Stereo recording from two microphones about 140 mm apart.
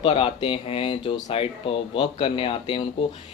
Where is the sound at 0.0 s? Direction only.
40° left (ahead or behind).